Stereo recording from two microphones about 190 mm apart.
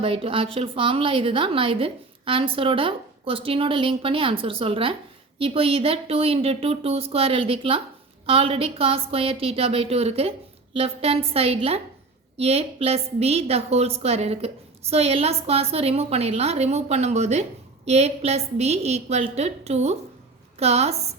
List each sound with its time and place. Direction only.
0.0 s a woman's voice: 30° right (ahead or behind)